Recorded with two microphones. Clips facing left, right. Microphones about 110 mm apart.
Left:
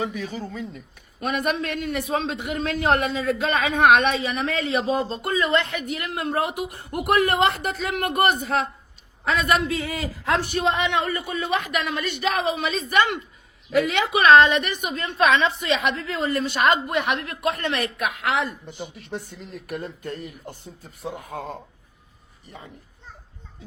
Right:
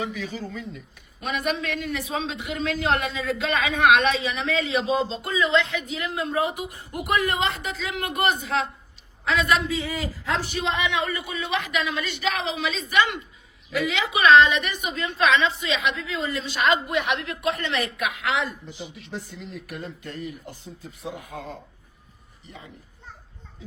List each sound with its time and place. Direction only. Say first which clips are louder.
0.2 s a man's voice: left 2 dB; 50° left (ahead or behind)
5.8 s a man's voice: left 1 dB; 60° left (ahead or behind)
15.5 s a man's voice: left 3 dB; 60° left (ahead or behind)